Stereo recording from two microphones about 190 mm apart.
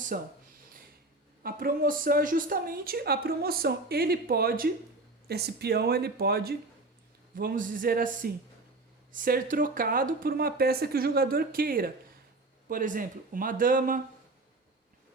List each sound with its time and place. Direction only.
0.1 s a woman's voice: 45° right (ahead or behind)
1.4 s a woman's voice: 50° right (ahead or behind)